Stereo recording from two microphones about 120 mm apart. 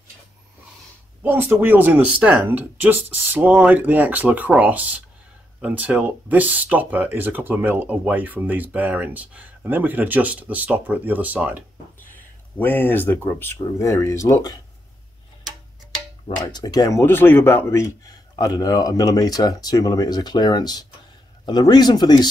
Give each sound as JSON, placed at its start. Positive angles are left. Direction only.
{"t": 1.2, "sound": "speech", "side_deg": -15}
{"t": 12.5, "sound": "speech", "side_deg": 15}
{"t": 16.5, "sound": "speech", "side_deg": 30}
{"t": 17.0, "sound": "speech", "side_deg": 15}